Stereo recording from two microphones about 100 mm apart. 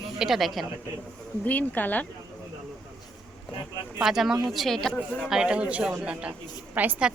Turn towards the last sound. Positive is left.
turn(degrees=-15)  # may be behind; listen again after turning